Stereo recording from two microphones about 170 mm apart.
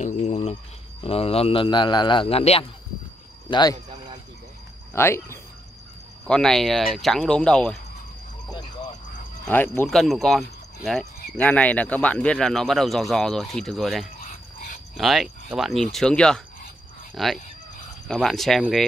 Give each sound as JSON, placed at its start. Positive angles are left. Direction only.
{"t": 0.0, "sound": "a sound", "side_deg": 45}
{"t": 1.0, "sound": "a man's voice", "side_deg": 35}
{"t": 4.9, "sound": "speech", "side_deg": 15}
{"t": 6.2, "sound": "speech", "side_deg": 5}
{"t": 9.5, "sound": "speech", "side_deg": 10}
{"t": 9.8, "sound": "speech", "side_deg": 0}